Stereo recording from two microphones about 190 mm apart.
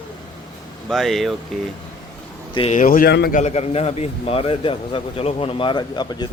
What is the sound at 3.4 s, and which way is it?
A man's voice, 35° left (ahead or behind).